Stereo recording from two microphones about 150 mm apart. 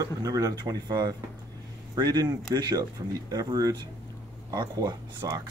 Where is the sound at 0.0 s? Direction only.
25° right (ahead or behind).